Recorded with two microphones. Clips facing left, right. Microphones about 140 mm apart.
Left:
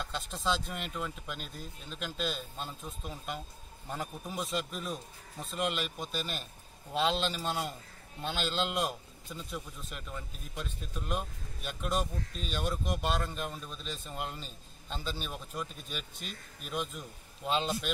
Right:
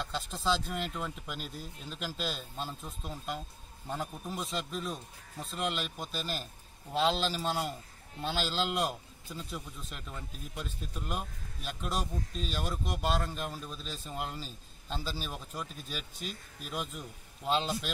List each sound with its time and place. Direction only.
0.0 s speech: centre (ahead or behind)